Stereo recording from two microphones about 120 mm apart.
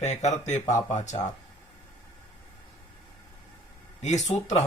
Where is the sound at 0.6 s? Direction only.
30° left (ahead or behind).